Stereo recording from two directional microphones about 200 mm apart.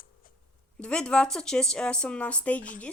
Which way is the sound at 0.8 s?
5° left (ahead or behind).